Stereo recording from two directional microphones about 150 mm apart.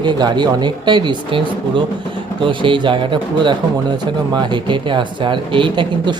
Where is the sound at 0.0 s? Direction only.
30° right (ahead or behind).